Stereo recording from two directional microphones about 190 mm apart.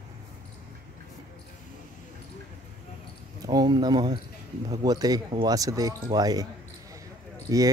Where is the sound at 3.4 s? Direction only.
20° right (ahead or behind).